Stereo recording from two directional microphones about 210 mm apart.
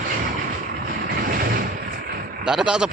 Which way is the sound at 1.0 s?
45° right (ahead or behind).